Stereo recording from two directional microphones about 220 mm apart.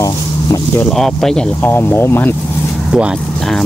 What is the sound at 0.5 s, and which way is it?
Speech, 5° left (ahead or behind).